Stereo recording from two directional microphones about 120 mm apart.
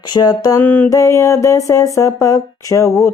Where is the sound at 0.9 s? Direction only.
25° left (ahead or behind).